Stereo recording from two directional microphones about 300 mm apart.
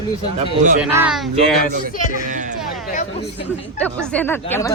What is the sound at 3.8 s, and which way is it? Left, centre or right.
Speech, centre.